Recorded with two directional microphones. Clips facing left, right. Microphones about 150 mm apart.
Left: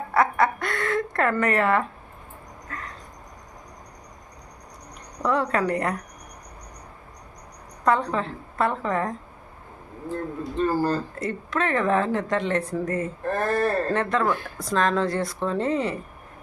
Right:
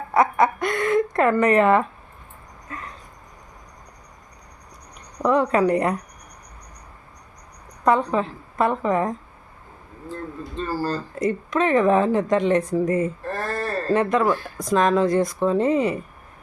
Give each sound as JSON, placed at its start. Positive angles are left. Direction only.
{"t": 0.1, "sound": "a sound", "side_deg": -20}
{"t": 5.2, "sound": "speech", "side_deg": -20}
{"t": 7.9, "sound": "speech", "side_deg": -15}
{"t": 10.1, "sound": "speech", "side_deg": 15}
{"t": 11.2, "sound": "speech", "side_deg": -15}
{"t": 13.2, "sound": "speech", "side_deg": 20}
{"t": 13.9, "sound": "speech", "side_deg": -15}